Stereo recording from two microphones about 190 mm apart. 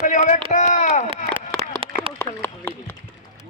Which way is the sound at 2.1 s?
10° left (ahead or behind).